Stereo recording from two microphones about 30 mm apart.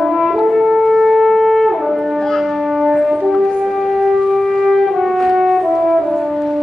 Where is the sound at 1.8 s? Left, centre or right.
Centre.